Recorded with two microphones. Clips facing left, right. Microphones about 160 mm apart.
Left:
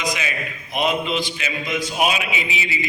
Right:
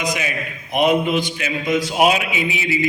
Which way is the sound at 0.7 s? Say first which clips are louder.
Right 5 dB; 55° right (ahead or behind).